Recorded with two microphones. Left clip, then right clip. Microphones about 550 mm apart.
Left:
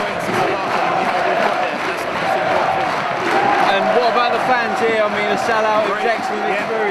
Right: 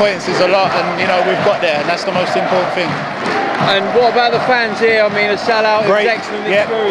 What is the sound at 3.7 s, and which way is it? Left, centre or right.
Speech, right.